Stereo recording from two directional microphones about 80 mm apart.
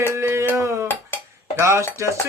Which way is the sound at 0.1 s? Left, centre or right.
Right.